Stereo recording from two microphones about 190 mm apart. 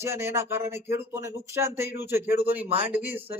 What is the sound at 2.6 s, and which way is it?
Speech, 30° right (ahead or behind).